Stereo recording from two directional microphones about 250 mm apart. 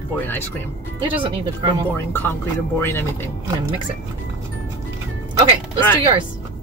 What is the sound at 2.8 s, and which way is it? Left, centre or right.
Speech, centre.